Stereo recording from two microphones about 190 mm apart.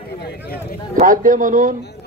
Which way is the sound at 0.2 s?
55° left (ahead or behind).